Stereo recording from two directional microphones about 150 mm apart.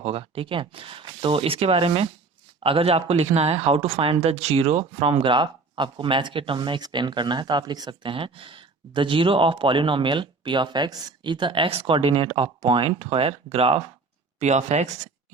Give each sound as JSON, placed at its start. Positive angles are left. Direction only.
{"t": 0.0, "sound": "speech", "side_deg": -40}